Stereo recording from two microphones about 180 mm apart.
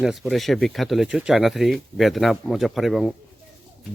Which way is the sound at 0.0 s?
Centre (ahead or behind).